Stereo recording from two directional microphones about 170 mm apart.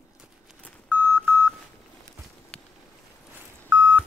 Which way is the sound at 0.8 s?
10° right (ahead or behind).